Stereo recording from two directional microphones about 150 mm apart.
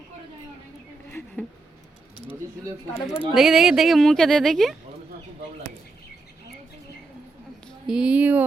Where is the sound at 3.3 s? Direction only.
Centre (ahead or behind).